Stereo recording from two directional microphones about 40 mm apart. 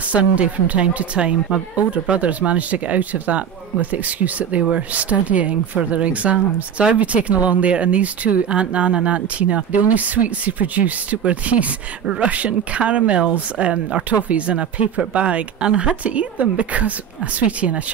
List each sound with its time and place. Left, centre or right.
0.1 s a woman's voice: right